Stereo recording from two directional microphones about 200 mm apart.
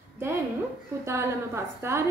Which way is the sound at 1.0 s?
15° right (ahead or behind).